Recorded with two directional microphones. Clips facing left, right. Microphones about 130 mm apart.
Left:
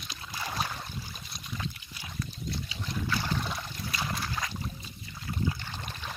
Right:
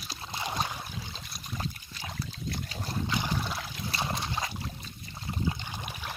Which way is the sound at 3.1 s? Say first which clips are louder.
Even; 15° right (ahead or behind).